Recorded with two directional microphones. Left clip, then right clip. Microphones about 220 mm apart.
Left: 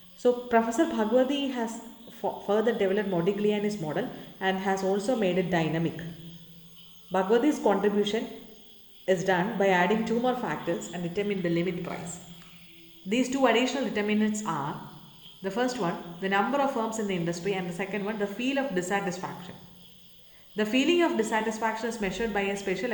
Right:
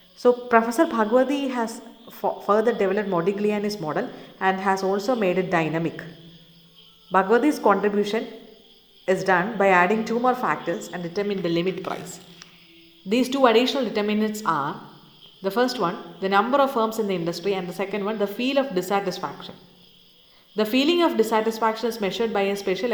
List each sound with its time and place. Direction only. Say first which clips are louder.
0.2 s speech: right 6 dB; 20° right (ahead or behind)
7.1 s a woman's voice: right 5 dB; 25° right (ahead or behind)
13.1 s speech: right 6 dB; 25° right (ahead or behind)
20.6 s speech: right 4 dB; 20° right (ahead or behind)